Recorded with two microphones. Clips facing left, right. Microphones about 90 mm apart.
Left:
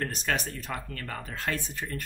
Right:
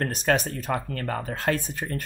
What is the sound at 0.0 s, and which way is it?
Speech, 45° right (ahead or behind).